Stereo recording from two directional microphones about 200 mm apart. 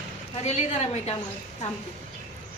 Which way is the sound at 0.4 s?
30° left (ahead or behind).